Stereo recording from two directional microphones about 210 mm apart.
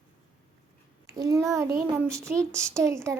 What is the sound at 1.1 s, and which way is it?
A child's voice, 15° right (ahead or behind).